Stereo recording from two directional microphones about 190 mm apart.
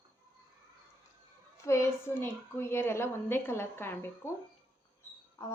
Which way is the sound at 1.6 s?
15° left (ahead or behind).